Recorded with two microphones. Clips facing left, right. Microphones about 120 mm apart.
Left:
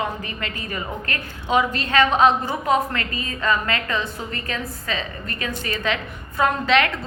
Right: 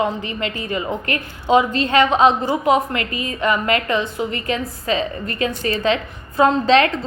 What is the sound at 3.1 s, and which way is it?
Speech, 35° left (ahead or behind).